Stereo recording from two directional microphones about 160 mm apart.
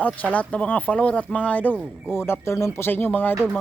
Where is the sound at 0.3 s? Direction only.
10° left (ahead or behind).